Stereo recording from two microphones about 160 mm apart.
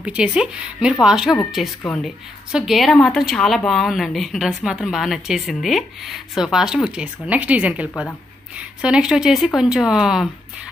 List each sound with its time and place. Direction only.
0.0 s speech: 5° right (ahead or behind)